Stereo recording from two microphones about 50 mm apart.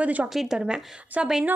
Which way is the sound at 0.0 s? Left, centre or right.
Right.